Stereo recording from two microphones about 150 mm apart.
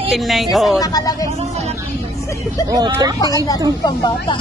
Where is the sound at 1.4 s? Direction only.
45° right (ahead or behind).